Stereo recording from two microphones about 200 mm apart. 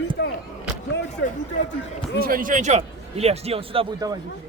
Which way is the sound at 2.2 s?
45° right (ahead or behind).